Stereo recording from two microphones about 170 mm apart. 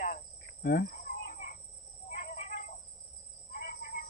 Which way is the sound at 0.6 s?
60° left (ahead or behind).